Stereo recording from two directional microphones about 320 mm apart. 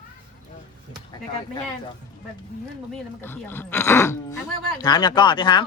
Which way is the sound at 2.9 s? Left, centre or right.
Centre.